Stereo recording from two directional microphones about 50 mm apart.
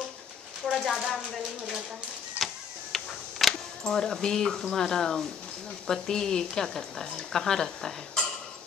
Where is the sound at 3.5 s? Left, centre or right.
Centre.